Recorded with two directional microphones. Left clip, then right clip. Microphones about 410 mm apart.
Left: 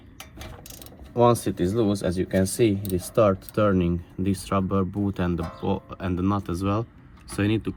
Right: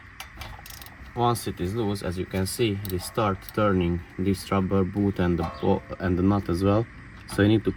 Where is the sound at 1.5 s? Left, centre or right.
Left.